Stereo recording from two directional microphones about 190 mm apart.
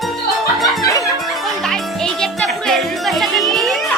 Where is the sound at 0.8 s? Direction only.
20° left (ahead or behind).